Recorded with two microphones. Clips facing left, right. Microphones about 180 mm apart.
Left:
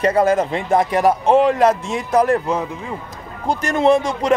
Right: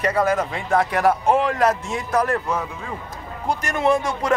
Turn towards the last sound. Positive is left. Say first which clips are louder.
# left 5 dB
turn(degrees=20)  # may be behind; listen again after turning